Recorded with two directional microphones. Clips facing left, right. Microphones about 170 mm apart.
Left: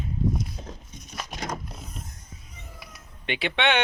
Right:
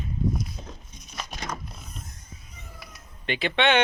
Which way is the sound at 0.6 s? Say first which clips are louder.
Left 2 dB; centre (ahead or behind).